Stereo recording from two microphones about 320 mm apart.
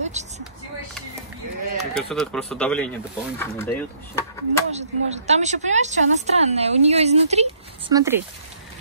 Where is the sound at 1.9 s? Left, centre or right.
Centre.